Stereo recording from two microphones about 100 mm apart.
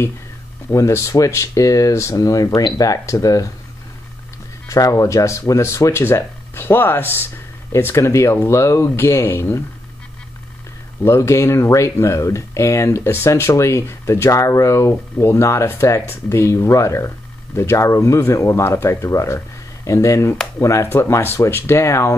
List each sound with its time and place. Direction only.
0.7 s speech: 30° left (ahead or behind)
4.6 s speech: 35° left (ahead or behind)
11.0 s speech: 30° left (ahead or behind)